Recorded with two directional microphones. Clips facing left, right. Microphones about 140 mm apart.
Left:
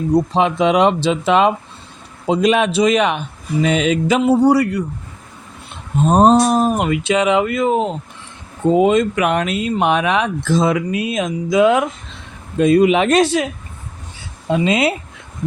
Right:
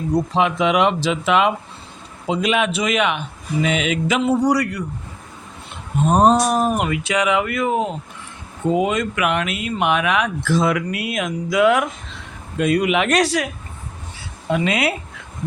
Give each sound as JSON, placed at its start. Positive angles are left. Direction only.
{"t": 0.3, "sound": "a man's voice", "side_deg": 30}
{"t": 6.1, "sound": "speech", "side_deg": 30}
{"t": 14.5, "sound": "speech", "side_deg": 25}